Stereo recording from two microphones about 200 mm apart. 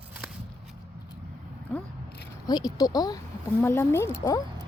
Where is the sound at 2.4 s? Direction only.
20° left (ahead or behind).